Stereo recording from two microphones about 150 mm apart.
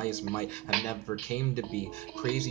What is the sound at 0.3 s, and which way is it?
Speech, 10° left (ahead or behind).